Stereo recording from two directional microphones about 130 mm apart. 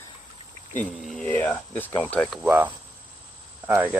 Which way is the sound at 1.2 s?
10° left (ahead or behind).